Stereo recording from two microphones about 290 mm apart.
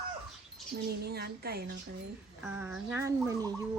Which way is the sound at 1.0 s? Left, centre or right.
Right.